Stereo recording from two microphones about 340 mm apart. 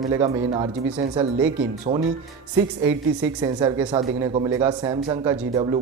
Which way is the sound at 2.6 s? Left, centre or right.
Centre.